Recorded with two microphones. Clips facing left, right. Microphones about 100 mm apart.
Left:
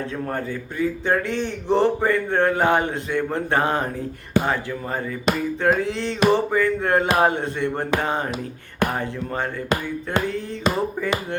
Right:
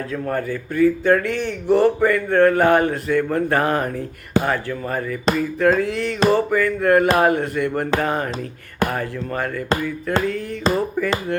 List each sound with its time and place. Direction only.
0.3 s speech: 25° left (ahead or behind)